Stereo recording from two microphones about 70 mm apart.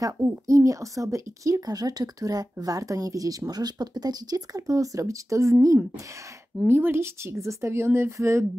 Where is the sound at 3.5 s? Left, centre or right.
Right.